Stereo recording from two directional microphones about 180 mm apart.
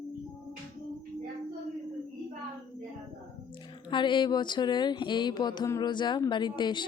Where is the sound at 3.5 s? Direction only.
25° left (ahead or behind).